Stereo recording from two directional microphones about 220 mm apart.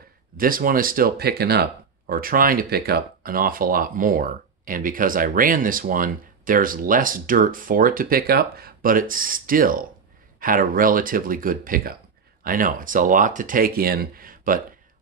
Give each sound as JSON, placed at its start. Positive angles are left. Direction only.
{"t": 0.4, "sound": "speech", "side_deg": -40}